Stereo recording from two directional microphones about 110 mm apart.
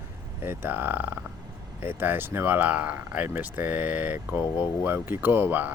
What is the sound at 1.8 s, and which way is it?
Speech, 20° right (ahead or behind).